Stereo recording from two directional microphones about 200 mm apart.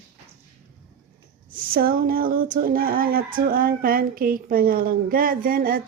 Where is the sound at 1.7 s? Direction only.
45° right (ahead or behind).